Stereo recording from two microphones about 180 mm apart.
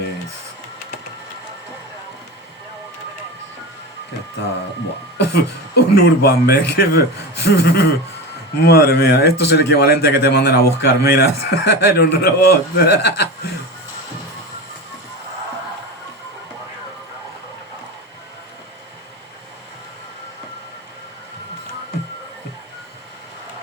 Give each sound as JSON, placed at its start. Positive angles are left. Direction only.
{"t": 5.1, "sound": "a man's voice", "side_deg": 65}